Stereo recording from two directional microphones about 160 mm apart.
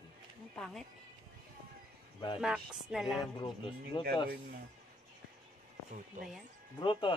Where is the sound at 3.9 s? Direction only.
30° left (ahead or behind).